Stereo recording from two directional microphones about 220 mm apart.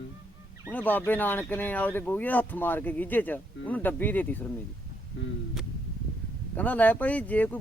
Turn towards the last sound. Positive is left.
turn(degrees=5)  # may be behind; listen again after turning